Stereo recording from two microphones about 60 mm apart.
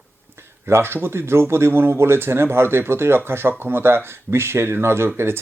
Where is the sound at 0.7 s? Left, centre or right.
Right.